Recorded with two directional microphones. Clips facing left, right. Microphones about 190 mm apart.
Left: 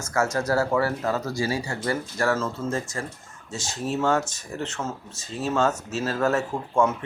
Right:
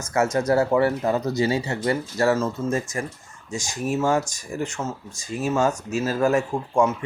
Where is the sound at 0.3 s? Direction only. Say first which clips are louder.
Right 5 dB; 20° right (ahead or behind).